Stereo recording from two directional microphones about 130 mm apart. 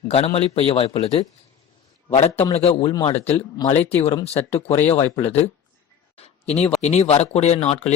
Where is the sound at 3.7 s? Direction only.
15° left (ahead or behind).